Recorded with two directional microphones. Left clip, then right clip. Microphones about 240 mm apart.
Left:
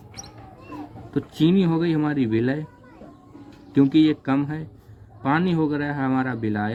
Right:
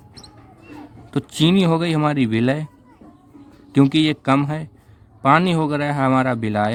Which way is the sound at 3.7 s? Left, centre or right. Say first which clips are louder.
Right 1 dB; right.